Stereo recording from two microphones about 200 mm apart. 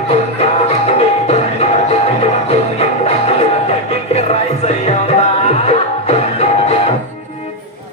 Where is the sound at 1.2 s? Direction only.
30° left (ahead or behind).